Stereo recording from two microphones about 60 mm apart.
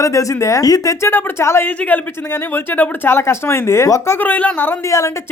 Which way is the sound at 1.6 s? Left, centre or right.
Left.